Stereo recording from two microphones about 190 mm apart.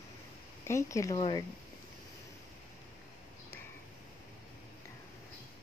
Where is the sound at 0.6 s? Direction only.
15° left (ahead or behind).